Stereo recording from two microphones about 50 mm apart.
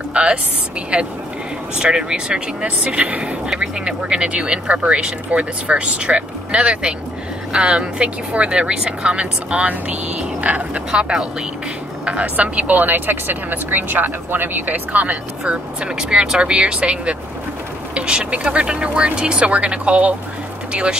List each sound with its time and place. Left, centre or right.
0.1 s a sound: right
0.9 s speech: right
15.4 s speech: centre